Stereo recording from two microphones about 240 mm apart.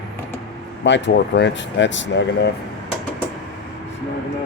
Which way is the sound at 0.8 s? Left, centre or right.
Left.